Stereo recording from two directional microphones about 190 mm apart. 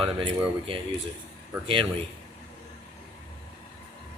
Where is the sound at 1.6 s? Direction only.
30° right (ahead or behind).